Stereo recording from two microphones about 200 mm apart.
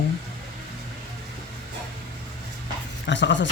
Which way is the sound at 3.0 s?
65° left (ahead or behind).